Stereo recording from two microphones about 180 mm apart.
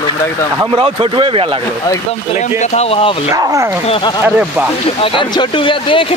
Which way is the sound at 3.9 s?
25° left (ahead or behind).